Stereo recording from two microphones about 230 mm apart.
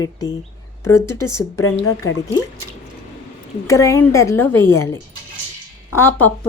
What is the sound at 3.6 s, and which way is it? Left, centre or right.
Speech, centre.